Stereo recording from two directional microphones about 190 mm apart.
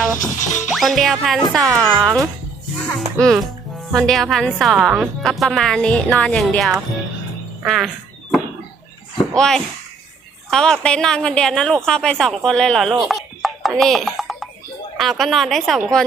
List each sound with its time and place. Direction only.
0.2 s music: 40° left (ahead or behind)
0.7 s a woman's voice: centre (ahead or behind)
9.3 s a woman's voice: 5° left (ahead or behind)
13.1 s a sound: centre (ahead or behind)
14.9 s a woman's voice: centre (ahead or behind)